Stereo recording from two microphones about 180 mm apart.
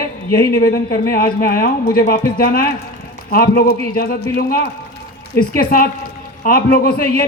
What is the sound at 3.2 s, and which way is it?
A man's voice, 60° left (ahead or behind).